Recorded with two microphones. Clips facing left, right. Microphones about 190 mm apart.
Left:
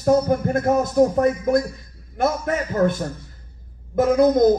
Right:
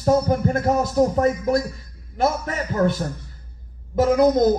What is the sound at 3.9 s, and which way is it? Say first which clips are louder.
Speech: left 1 dB; 55° left (ahead or behind).